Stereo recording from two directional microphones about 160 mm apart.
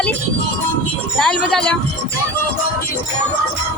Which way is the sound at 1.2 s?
Centre (ahead or behind).